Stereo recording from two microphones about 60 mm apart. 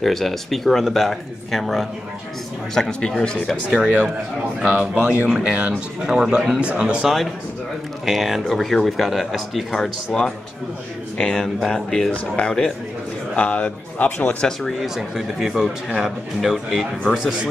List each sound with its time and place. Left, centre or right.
0.0 s speech: centre
3.7 s speech: right
6.0 s a man's voice: centre
6.6 s speech: centre
8.0 s a man's voice: centre; by 14.3 s left
14.4 s a man's voice: centre